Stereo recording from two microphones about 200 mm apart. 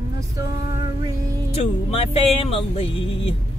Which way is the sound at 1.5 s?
30° left (ahead or behind).